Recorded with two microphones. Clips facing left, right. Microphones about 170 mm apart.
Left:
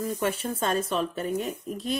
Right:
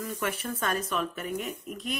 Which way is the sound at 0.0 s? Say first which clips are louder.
Left 5 dB; 30° left (ahead or behind).